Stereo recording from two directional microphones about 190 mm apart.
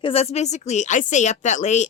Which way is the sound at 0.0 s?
30° left (ahead or behind).